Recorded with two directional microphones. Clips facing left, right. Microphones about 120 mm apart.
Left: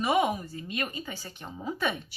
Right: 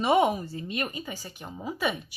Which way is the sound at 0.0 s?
30° right (ahead or behind).